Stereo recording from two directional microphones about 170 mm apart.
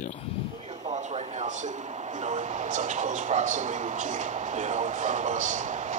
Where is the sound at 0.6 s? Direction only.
45° right (ahead or behind).